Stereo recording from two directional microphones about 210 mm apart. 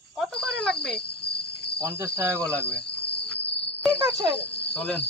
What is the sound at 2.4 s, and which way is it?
Cricket, 5° left (ahead or behind).